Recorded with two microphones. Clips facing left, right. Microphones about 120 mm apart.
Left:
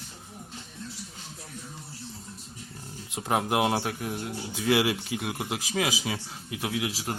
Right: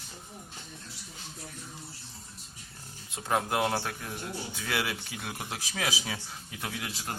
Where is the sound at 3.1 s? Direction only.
15° left (ahead or behind).